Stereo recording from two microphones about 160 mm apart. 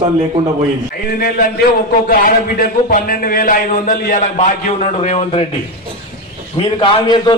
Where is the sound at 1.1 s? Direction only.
70° left (ahead or behind).